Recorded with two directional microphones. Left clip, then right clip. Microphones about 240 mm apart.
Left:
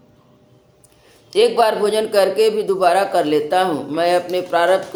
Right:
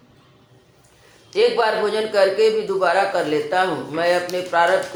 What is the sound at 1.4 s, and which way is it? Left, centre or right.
A man's voice, left.